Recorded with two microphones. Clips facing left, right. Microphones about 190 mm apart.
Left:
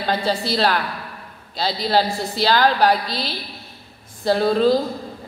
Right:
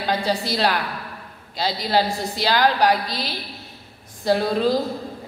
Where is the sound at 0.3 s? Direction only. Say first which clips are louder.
Left 3 dB; 15° right (ahead or behind).